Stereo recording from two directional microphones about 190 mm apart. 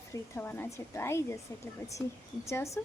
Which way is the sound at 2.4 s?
15° left (ahead or behind).